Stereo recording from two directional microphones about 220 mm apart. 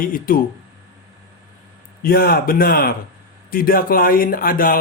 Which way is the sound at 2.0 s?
45° left (ahead or behind).